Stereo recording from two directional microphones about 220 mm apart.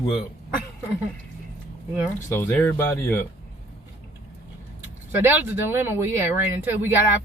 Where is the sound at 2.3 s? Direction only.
10° left (ahead or behind).